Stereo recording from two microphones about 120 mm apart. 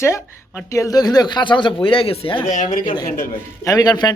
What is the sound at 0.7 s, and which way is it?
Speech, 30° left (ahead or behind).